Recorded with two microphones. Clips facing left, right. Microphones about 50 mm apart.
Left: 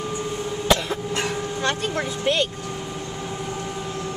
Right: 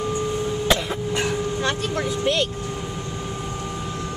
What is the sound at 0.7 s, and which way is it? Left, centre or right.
Throat clearing, centre.